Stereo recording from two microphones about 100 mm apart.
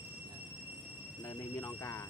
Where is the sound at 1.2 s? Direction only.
30° left (ahead or behind).